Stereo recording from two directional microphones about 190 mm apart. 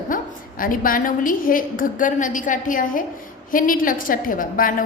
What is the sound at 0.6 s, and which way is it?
A woman's voice, 45° left (ahead or behind).